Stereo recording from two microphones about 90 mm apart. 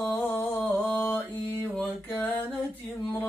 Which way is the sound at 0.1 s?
20° left (ahead or behind).